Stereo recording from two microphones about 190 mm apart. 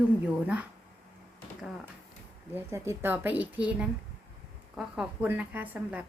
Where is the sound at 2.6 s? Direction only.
15° right (ahead or behind).